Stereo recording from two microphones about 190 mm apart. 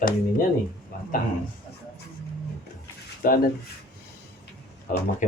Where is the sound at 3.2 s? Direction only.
50° left (ahead or behind).